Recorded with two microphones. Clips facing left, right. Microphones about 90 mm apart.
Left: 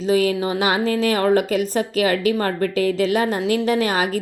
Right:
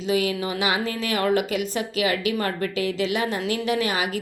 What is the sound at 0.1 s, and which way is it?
Speech, 35° left (ahead or behind).